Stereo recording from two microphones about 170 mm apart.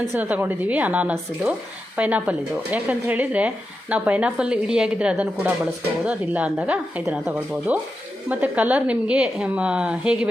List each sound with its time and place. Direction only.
0.1 s speech: 10° right (ahead or behind)